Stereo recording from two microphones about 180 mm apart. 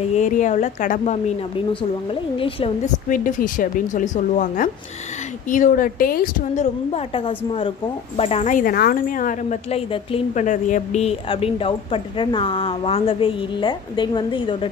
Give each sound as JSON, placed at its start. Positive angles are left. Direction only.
{"t": 0.1, "sound": "a woman's voice", "side_deg": 40}
{"t": 2.3, "sound": "a woman's voice", "side_deg": 30}
{"t": 3.1, "sound": "a woman's voice", "side_deg": 50}
{"t": 10.4, "sound": "a woman's voice", "side_deg": 45}